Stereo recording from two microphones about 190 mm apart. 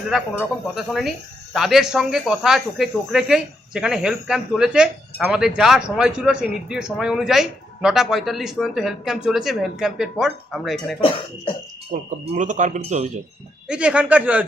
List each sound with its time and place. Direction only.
0.8 s speech: centre (ahead or behind)
11.9 s speech: 40° right (ahead or behind)
13.7 s a man's voice: 5° right (ahead or behind)